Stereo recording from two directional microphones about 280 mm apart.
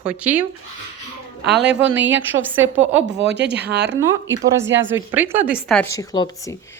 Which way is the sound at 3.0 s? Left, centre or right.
Right.